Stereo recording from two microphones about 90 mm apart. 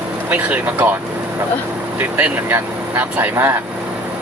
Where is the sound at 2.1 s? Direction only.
20° right (ahead or behind).